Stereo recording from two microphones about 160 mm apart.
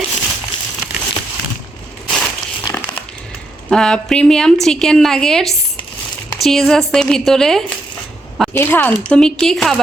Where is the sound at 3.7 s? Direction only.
5° left (ahead or behind).